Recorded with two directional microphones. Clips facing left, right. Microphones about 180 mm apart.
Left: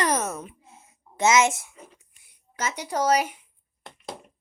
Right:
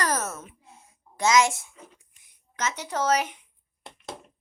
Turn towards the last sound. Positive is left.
turn(degrees=10)  # may be behind; listen again after turning